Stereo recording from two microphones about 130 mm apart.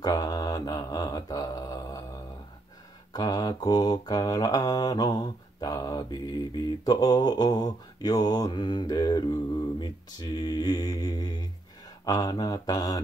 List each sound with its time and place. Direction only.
0.0 s mantra: 30° left (ahead or behind)
3.1 s mantra: 30° left (ahead or behind)